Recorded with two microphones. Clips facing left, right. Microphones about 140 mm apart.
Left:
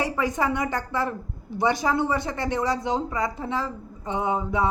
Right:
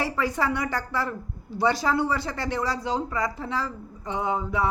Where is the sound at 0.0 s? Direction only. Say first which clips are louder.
Left 1 dB; 20° left (ahead or behind).